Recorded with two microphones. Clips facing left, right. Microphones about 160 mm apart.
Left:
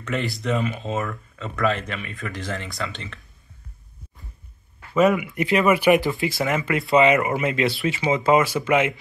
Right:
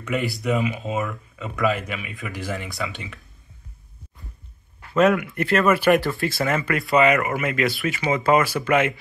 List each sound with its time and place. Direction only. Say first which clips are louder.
0.0 s speech: right 1 dB; 10° right (ahead or behind)
4.9 s speech: even; 5° left (ahead or behind)